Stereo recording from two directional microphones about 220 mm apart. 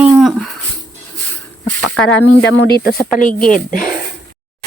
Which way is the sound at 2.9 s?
15° left (ahead or behind).